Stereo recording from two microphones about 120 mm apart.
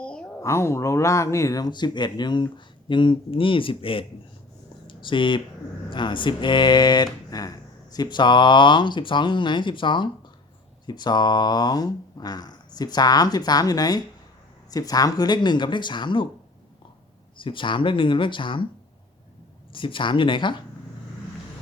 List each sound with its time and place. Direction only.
0.0 s a sound: 10° left (ahead or behind)
0.4 s speech: 25° left (ahead or behind); by 16.3 s 40° left (ahead or behind)
17.4 s speech: 45° left (ahead or behind)
19.7 s speech: 45° left (ahead or behind)